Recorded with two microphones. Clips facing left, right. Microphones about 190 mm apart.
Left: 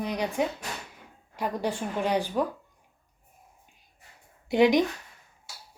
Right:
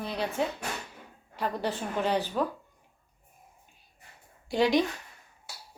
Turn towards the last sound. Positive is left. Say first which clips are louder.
# left 4 dB
turn(degrees=20)  # may be behind; listen again after turning